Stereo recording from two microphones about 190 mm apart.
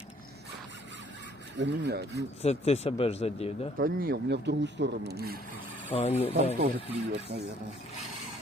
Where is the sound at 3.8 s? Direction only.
50° right (ahead or behind).